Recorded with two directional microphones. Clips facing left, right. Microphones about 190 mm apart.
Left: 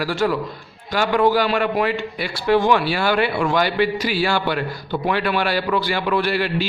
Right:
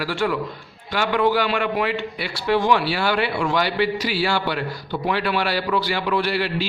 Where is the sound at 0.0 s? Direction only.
40° left (ahead or behind).